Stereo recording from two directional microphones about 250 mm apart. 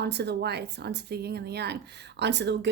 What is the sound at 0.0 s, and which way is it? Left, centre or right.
Speech, right.